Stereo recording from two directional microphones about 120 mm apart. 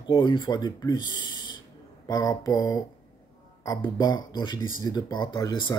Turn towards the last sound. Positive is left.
turn(degrees=35)  # may be behind; listen again after turning